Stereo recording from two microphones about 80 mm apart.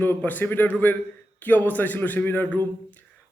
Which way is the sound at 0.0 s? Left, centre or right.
Left.